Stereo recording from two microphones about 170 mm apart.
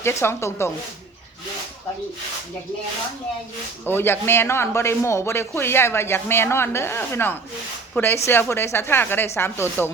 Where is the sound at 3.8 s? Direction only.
15° left (ahead or behind).